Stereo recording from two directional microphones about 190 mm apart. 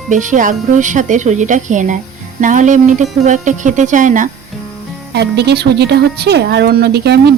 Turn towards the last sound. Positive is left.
turn(degrees=-60)  # may be behind; listen again after turning